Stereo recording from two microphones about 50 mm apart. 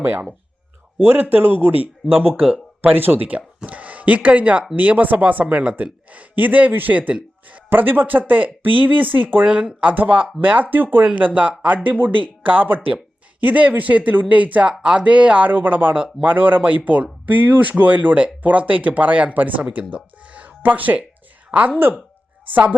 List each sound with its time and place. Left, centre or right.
0.0 s speech: right
14.7 s speech: centre; by 21.0 s right